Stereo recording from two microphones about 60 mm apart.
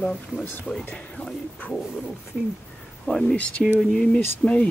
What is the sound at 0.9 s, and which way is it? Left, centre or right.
Speech, centre.